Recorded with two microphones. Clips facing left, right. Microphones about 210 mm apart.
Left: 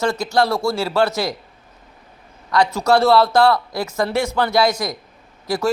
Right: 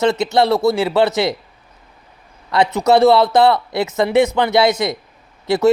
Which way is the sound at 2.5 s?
20° right (ahead or behind).